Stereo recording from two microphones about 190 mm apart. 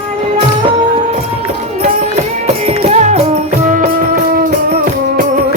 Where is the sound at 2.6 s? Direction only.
35° right (ahead or behind).